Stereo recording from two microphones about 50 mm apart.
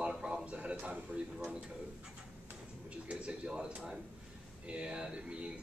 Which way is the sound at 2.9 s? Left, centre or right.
Right.